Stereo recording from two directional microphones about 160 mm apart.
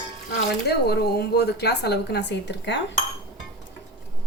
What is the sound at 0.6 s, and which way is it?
A woman's voice, 90° left.